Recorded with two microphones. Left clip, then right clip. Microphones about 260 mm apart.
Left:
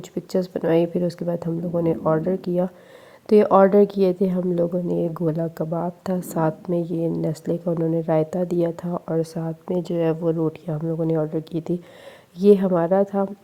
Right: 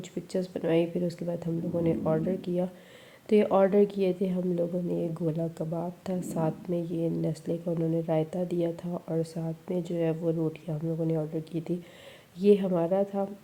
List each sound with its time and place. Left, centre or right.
0.3 s a woman's voice: left